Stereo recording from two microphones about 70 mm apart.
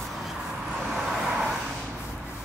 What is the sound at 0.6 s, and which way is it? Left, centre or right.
Vehicle, centre.